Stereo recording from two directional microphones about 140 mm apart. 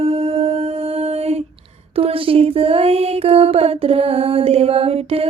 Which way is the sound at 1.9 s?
45° right (ahead or behind).